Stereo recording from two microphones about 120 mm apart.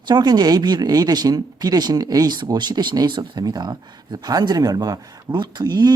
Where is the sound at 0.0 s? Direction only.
35° right (ahead or behind).